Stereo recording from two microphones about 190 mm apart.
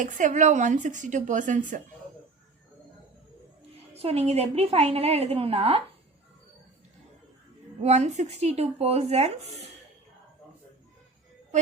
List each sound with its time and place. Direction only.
0.0 s a woman's voice: 40° right (ahead or behind)
3.9 s a woman's voice: 35° right (ahead or behind)
7.8 s a woman's voice: 35° right (ahead or behind)